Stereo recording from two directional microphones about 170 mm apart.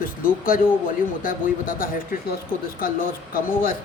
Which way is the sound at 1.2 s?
55° left (ahead or behind).